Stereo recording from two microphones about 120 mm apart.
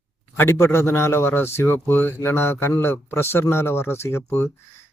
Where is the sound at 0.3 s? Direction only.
20° left (ahead or behind).